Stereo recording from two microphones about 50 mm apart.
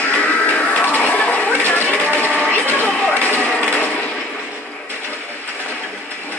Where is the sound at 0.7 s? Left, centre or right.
Left.